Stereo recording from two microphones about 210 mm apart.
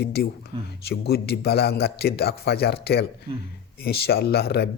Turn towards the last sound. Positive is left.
turn(degrees=50)  # may be behind; listen again after turning